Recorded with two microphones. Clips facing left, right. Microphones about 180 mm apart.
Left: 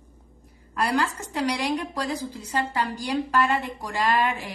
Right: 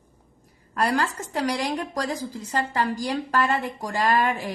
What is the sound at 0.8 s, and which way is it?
A woman's voice, 40° right (ahead or behind).